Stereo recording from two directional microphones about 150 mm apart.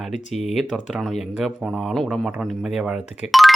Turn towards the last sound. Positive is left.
turn(degrees=0)  # may be behind; listen again after turning